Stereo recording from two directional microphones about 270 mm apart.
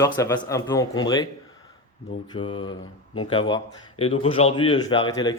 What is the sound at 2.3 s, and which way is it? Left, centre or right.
Speech, centre.